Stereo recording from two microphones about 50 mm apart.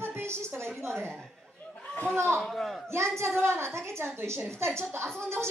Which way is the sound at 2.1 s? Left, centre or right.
Right.